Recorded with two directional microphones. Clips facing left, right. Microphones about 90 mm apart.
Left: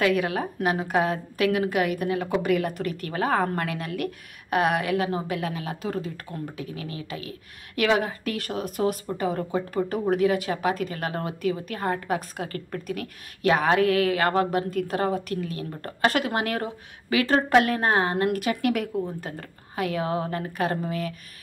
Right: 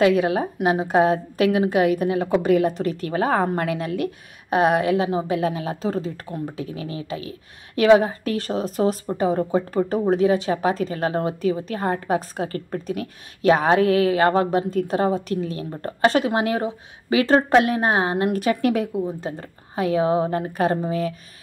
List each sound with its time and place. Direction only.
0.0 s a woman's voice: 25° right (ahead or behind)
18.4 s a woman's voice: 35° right (ahead or behind)